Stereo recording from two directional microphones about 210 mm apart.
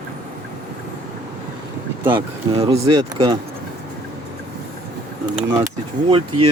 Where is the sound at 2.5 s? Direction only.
30° right (ahead or behind).